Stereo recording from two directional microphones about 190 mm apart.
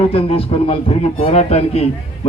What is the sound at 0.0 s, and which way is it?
A man's voice, 30° left (ahead or behind).